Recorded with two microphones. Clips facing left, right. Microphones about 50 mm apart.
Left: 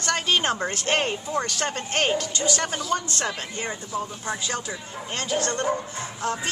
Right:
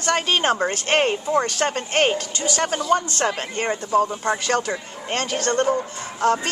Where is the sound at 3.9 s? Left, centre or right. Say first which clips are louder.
Right 12 dB; right.